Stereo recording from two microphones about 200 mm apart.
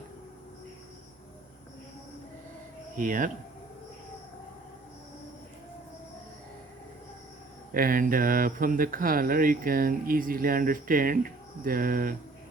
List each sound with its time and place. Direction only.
3.0 s speech: 40° right (ahead or behind)
7.7 s speech: 45° right (ahead or behind)